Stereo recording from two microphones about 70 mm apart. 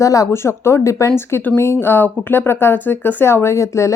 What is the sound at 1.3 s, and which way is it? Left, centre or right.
Speech, left.